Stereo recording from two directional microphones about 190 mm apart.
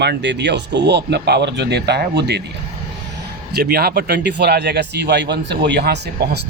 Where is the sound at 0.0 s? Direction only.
65° right (ahead or behind).